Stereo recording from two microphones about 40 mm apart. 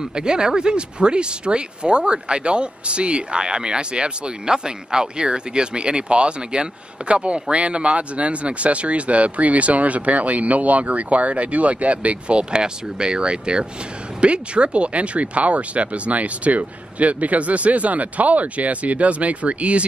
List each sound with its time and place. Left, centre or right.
0.0 s speech: right